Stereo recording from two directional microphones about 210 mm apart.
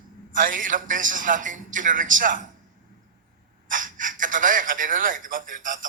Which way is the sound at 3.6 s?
40° right (ahead or behind).